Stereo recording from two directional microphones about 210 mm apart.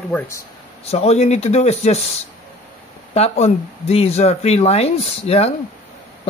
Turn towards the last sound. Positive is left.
turn(degrees=30)  # may be behind; listen again after turning